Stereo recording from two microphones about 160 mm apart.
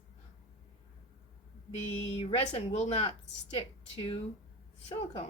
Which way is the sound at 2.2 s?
40° left (ahead or behind).